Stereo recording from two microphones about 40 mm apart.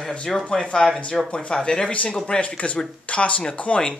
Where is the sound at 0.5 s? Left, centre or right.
Centre; by 3.9 s left.